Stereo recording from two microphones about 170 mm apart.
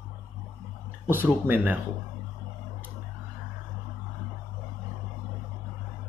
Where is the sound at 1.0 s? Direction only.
10° right (ahead or behind).